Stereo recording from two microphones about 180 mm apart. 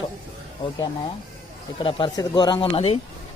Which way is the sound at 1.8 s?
30° left (ahead or behind).